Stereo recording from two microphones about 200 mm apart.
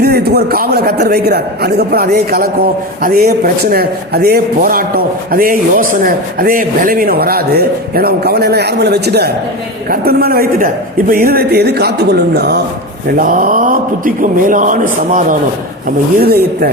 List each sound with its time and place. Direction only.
0.0 s a man's voice: 55° right (ahead or behind)
13.1 s a man's voice: 40° right (ahead or behind)
16.2 s a man's voice: 50° right (ahead or behind)